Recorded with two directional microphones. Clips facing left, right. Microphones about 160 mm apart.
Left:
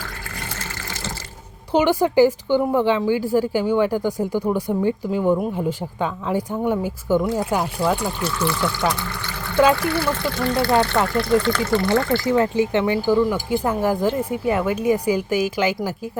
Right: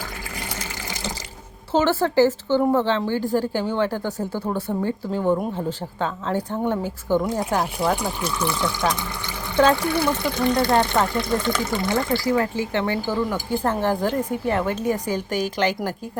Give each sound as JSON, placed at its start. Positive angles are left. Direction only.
{"t": 0.5, "sound": "water", "side_deg": -15}
{"t": 1.7, "sound": "speech", "side_deg": 15}
{"t": 7.9, "sound": "speech", "side_deg": -15}
{"t": 12.2, "sound": "speech", "side_deg": 20}